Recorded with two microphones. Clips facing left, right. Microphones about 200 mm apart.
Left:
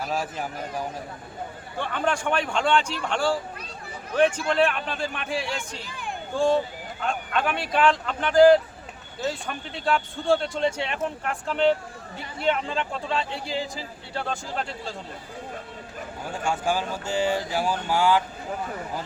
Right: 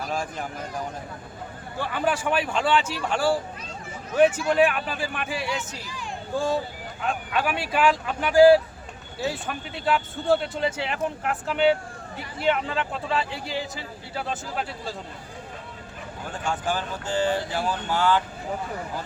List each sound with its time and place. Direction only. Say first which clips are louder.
0.1 s speech: even; 5° left (ahead or behind)
1.8 s speech: right 1 dB; 5° right (ahead or behind)
5.8 s a sound: left 1 dB; 55° left (ahead or behind)
7.0 s speech: even; 5° right (ahead or behind)
16.5 s speech: left 2 dB; 10° left (ahead or behind)